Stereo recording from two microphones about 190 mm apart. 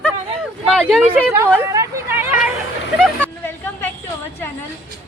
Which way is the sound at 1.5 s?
15° right (ahead or behind).